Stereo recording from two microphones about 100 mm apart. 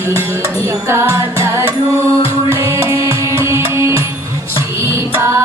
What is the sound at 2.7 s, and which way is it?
Music, 30° right (ahead or behind).